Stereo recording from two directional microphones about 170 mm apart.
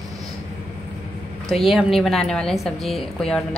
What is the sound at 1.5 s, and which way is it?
A woman's voice, centre (ahead or behind).